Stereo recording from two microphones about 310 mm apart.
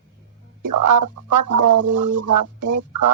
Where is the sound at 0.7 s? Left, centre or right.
Right.